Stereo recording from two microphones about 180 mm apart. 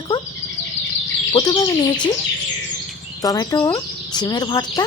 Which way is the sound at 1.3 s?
20° left (ahead or behind).